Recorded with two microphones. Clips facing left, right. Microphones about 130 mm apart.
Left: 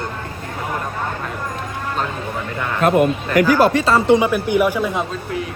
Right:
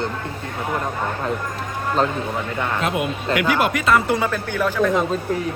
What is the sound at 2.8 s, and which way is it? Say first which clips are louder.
Speech: left 10 dB; 50° left (ahead or behind).